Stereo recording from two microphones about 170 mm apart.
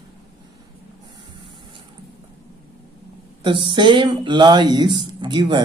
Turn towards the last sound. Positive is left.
turn(degrees=-25)  # may be behind; listen again after turning